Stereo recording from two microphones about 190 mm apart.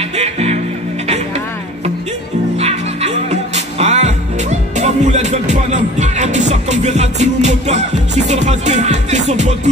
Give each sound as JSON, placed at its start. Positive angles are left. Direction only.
{"t": 0.1, "sound": "music", "side_deg": -35}
{"t": 2.5, "sound": "music", "side_deg": -35}